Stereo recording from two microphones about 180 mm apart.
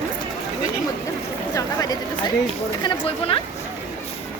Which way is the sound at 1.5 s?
20° left (ahead or behind).